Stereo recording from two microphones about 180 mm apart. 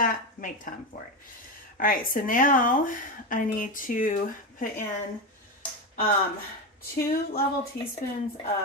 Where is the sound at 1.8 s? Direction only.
50° left (ahead or behind).